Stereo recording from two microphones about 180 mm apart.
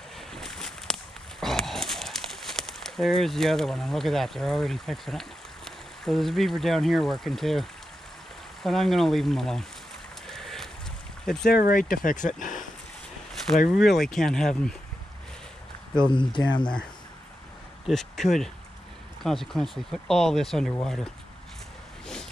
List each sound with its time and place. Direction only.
0.3 s a sound: centre (ahead or behind)
6.0 s speech: centre (ahead or behind)
8.6 s speech: centre (ahead or behind)
10.2 s a sound: centre (ahead or behind)
11.2 s speech: 5° left (ahead or behind)
11.5 s speech: 55° left (ahead or behind)
13.7 s speech: centre (ahead or behind)
16.1 s speech: 25° left (ahead or behind)
17.8 s speech: centre (ahead or behind)